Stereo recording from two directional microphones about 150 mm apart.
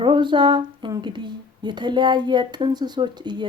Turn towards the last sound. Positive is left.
turn(degrees=-30)  # may be behind; listen again after turning